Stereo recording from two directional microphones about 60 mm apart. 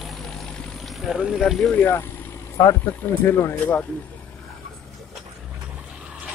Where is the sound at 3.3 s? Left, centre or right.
Left.